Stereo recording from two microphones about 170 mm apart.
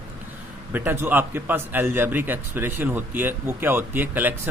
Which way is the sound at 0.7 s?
10° right (ahead or behind).